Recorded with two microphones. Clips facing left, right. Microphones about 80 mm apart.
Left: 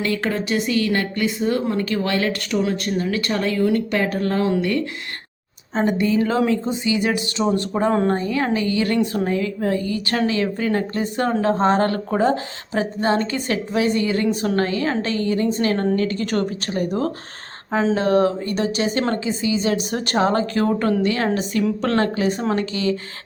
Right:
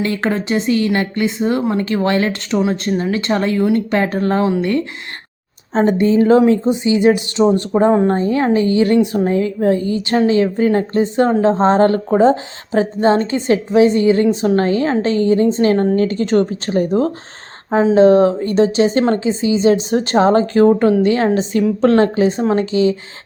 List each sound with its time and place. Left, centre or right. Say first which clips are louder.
0.0 s a woman's voice: right 4 dB; right
5.7 s a woman's voice: right 6 dB; right